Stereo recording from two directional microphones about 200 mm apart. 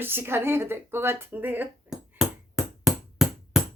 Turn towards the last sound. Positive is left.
turn(degrees=0)  # may be behind; listen again after turning